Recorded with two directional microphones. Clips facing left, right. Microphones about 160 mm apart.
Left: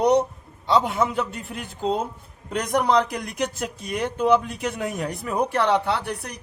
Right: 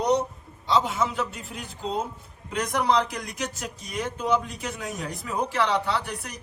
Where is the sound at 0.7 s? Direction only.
60° left (ahead or behind).